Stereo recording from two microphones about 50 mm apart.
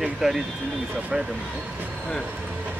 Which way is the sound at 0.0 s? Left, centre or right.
Centre.